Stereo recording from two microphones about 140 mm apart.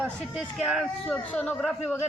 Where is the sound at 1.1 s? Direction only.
10° left (ahead or behind).